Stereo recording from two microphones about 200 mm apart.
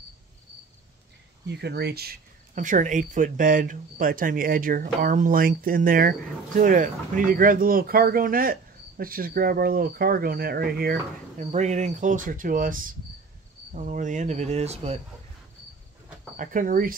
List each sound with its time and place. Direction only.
1.5 s speech: 55° right (ahead or behind)
11.3 s speech: 35° right (ahead or behind)
16.3 s speech: 40° right (ahead or behind)